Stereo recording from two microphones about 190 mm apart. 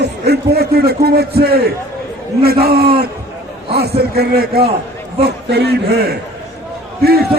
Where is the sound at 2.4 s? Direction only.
55° right (ahead or behind).